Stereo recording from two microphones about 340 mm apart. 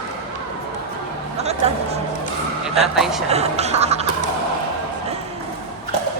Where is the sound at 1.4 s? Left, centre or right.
Centre.